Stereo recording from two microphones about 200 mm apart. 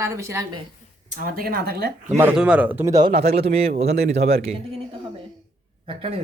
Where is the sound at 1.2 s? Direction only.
50° right (ahead or behind).